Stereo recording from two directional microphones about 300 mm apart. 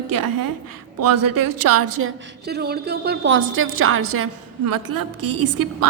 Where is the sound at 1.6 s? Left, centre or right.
Right.